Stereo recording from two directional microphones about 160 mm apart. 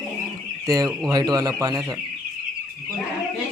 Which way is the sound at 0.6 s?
20° right (ahead or behind).